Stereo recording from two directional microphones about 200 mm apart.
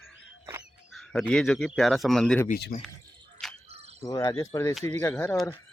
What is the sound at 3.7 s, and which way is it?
Cricket, 30° right (ahead or behind).